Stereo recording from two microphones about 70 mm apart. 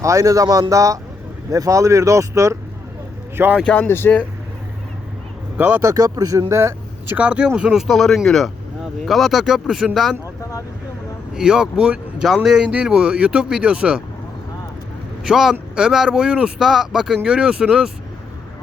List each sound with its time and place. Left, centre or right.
0.0 s speech: right
3.4 s speech: right
3.8 s speech: left
5.5 s speech: right
5.8 s speech: right
6.5 s speech: right
7.2 s speech: centre
7.9 s speech: centre
11.3 s speech: centre
15.2 s speech: centre